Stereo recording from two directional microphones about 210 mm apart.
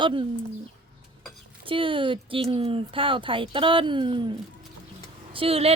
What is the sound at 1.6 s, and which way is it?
Speech, 25° right (ahead or behind).